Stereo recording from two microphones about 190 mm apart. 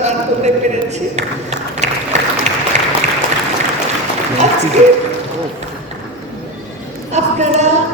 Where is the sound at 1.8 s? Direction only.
40° right (ahead or behind).